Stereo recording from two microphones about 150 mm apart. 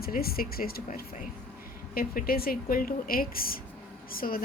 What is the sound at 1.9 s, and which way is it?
A woman's voice, 80° left.